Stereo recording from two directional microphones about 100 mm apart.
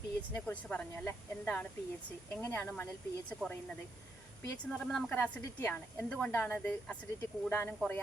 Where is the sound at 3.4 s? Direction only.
15° right (ahead or behind).